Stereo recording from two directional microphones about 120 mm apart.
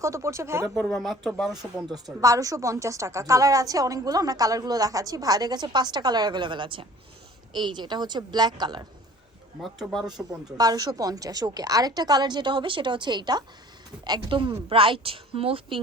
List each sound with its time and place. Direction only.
0.0 s speech: 25° right (ahead or behind)
0.7 s speech: centre (ahead or behind)
1.9 s a woman's voice: 30° right (ahead or behind)
9.6 s speech: centre (ahead or behind)
10.6 s a woman's voice: 35° right (ahead or behind); by 15.8 s 50° right (ahead or behind)